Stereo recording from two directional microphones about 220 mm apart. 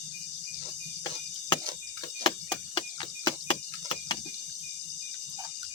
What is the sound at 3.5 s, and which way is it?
Cricket, 20° left (ahead or behind).